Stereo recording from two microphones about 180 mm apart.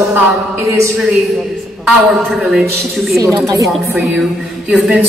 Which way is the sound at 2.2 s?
Centre (ahead or behind).